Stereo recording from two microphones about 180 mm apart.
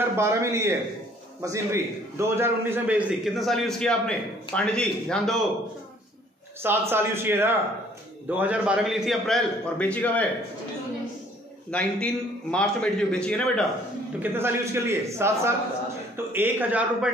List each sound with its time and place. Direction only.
0.1 s a man's voice: 15° right (ahead or behind); by 5.5 s centre (ahead or behind)
6.6 s a man's voice: 10° right (ahead or behind); by 10.2 s 10° left (ahead or behind)
11.7 s a man's voice: 5° left (ahead or behind)
14.2 s a man's voice: 10° right (ahead or behind)